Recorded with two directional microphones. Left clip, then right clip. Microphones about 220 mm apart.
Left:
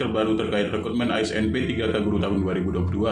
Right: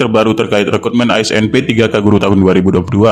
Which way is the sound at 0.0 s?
50° right (ahead or behind).